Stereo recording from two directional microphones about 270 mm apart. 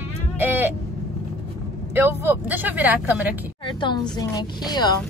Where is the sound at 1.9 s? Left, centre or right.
Centre.